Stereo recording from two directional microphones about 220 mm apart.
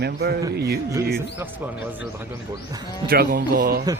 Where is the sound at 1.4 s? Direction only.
5° right (ahead or behind).